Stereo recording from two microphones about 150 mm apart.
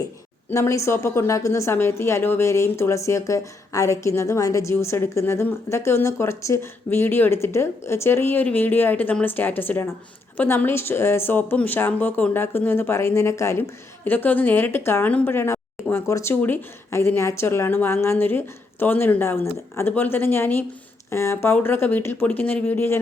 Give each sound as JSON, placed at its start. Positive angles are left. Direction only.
{"t": 0.5, "sound": "a woman's voice", "side_deg": 20}